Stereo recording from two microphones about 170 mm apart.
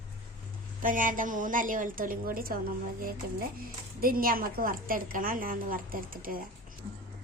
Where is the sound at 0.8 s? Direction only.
50° right (ahead or behind).